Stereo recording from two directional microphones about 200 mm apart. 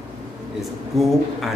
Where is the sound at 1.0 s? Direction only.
Centre (ahead or behind).